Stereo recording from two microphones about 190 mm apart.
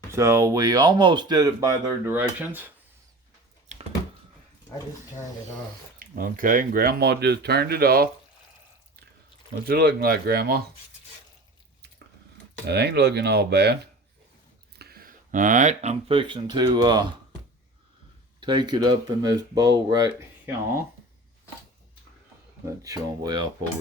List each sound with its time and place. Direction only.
0.1 s speech: 15° right (ahead or behind)
6.0 s speech: 45° right (ahead or behind)
9.6 s speech: 55° right (ahead or behind)
12.6 s speech: 60° right (ahead or behind)
14.8 s speech: 55° right (ahead or behind); by 17.2 s 20° right (ahead or behind)
18.3 s speech: 25° right (ahead or behind)
22.6 s speech: 20° right (ahead or behind)